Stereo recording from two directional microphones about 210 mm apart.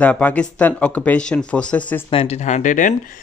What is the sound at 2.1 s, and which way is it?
Speech, 30° left (ahead or behind).